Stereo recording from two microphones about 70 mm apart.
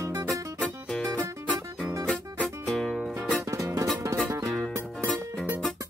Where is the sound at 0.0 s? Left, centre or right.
Right.